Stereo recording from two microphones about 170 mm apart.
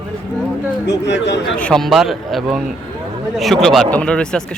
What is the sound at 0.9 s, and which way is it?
Speech, 90° left.